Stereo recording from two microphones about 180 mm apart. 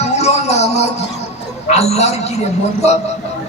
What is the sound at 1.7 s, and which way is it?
Speech, 35° left (ahead or behind).